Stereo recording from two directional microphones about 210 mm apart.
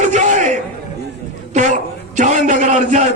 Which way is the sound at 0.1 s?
35° right (ahead or behind).